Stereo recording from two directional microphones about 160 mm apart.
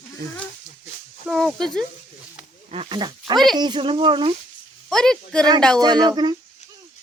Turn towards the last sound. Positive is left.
turn(degrees=-25)  # may be behind; listen again after turning